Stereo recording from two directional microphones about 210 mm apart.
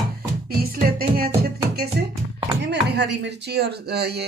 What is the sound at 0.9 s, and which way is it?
Speech, 45° right (ahead or behind).